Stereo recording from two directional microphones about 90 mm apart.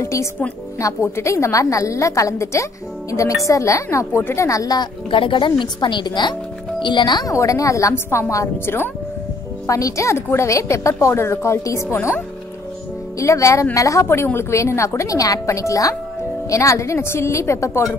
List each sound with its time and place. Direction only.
0.0 s a woman's voice: 30° left (ahead or behind)
4.2 s a woman's voice: 25° left (ahead or behind)
4.5 s speech: 45° left (ahead or behind)
5.1 s a woman's voice: 70° left (ahead or behind)
7.2 s a woman's voice: 40° left (ahead or behind)
9.7 s a woman's voice: 40° left (ahead or behind)
13.2 s a woman's voice: 35° left (ahead or behind)